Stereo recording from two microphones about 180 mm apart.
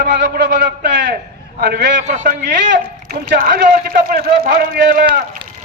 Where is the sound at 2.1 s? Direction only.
40° right (ahead or behind).